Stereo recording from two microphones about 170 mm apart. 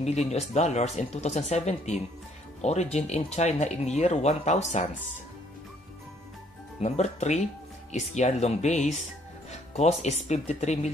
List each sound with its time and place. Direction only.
0.0 s speech: 40° left (ahead or behind)
6.8 s speech: 40° left (ahead or behind)